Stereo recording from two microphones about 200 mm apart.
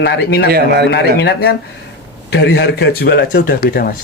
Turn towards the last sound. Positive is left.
turn(degrees=50)  # may be behind; listen again after turning